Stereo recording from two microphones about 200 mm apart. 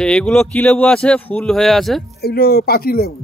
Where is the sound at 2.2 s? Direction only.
50° left (ahead or behind).